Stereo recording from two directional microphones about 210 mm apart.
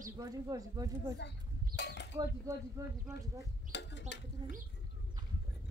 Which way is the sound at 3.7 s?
55° left (ahead or behind).